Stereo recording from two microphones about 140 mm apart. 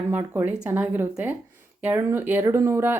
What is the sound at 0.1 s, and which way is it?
Speech, 15° right (ahead or behind).